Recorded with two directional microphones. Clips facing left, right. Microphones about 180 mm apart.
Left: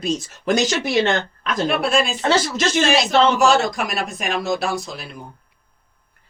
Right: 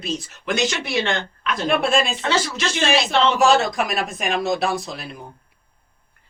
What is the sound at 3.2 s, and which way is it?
A woman's voice, centre (ahead or behind).